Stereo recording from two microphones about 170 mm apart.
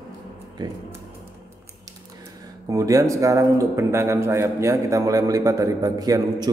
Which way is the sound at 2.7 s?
20° right (ahead or behind).